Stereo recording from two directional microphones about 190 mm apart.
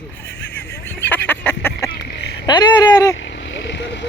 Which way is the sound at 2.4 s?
25° left (ahead or behind).